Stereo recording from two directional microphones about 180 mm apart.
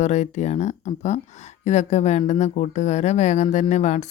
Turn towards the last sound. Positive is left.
turn(degrees=40)  # may be behind; listen again after turning